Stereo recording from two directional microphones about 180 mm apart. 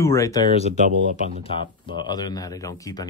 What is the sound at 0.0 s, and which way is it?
Speech, 15° left (ahead or behind).